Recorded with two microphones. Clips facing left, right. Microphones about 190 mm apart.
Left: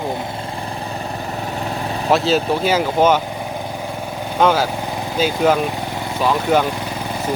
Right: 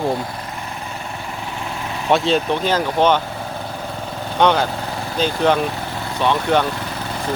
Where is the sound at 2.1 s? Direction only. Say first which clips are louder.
Even; centre (ahead or behind).